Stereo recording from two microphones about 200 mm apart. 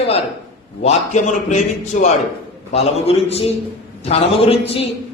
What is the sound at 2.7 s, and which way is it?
A man's voice, 30° left (ahead or behind).